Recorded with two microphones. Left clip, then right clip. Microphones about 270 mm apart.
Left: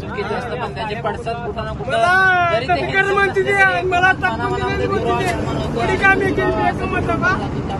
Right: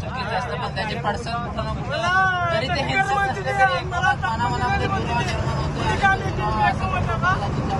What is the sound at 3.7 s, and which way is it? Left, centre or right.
Speech, left.